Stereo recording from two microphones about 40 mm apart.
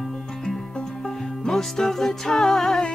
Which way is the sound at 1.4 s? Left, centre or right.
Centre.